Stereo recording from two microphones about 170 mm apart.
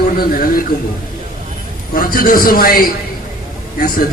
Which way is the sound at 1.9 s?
55° left (ahead or behind).